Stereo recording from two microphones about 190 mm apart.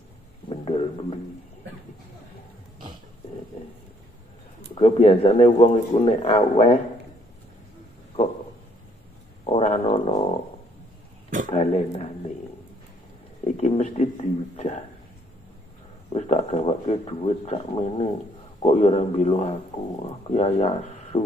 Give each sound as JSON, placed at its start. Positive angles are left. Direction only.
{"t": 0.5, "sound": "a sound", "side_deg": 30}
{"t": 4.7, "sound": "speech", "side_deg": 30}
{"t": 9.5, "sound": "speech", "side_deg": 30}
{"t": 11.4, "sound": "speech", "side_deg": 35}
{"t": 13.4, "sound": "speech", "side_deg": 35}
{"t": 16.1, "sound": "speech", "side_deg": 35}